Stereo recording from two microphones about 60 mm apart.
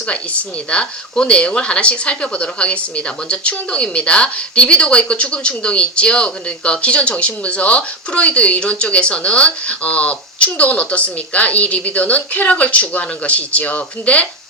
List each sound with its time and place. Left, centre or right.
0.1 s a woman's voice: centre